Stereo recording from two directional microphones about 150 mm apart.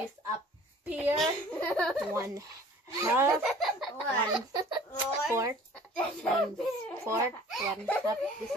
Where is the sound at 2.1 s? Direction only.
20° right (ahead or behind).